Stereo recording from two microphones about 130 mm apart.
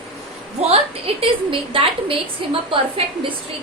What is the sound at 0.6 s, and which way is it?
A woman's voice, 50° right (ahead or behind).